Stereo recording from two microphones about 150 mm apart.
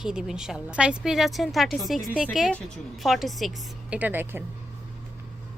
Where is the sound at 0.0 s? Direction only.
5° right (ahead or behind).